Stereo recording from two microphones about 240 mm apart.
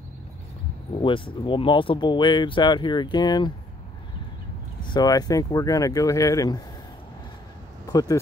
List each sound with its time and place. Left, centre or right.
1.0 s speech: left
4.9 s speech: centre
7.9 s speech: centre